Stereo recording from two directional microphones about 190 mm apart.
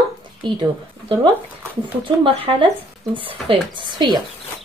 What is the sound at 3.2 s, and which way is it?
Speech, 25° right (ahead or behind).